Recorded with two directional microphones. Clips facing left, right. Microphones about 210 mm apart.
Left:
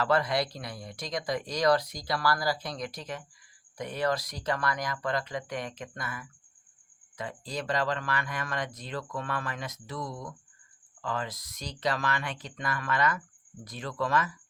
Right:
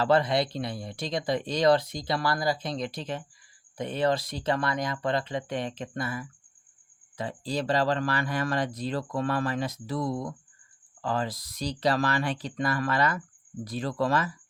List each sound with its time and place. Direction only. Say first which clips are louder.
0.0 s speech: right 3 dB; 25° right (ahead or behind)